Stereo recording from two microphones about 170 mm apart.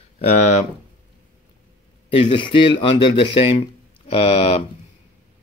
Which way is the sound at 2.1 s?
35° left (ahead or behind).